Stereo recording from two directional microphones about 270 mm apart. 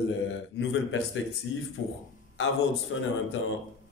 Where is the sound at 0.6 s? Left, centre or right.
Left.